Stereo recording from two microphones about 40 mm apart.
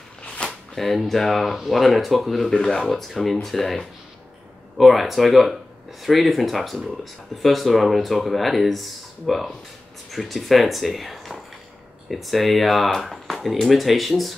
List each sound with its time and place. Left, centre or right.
0.2 s a sound: left
0.7 s speech: centre
2.5 s speech: centre
2.9 s speech: centre
4.7 s speech: centre